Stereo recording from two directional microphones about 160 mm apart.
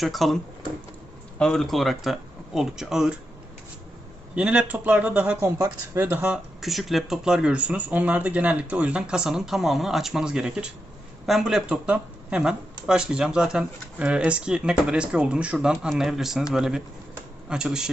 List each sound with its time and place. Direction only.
0.0 s speech: centre (ahead or behind)
1.4 s speech: 5° left (ahead or behind)
4.4 s speech: 5° right (ahead or behind)
5.5 s speech: 20° right (ahead or behind)
6.0 s speech: 10° right (ahead or behind)